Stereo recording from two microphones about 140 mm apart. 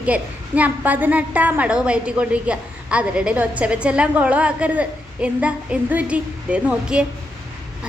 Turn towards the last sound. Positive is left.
turn(degrees=-5)  # may be behind; listen again after turning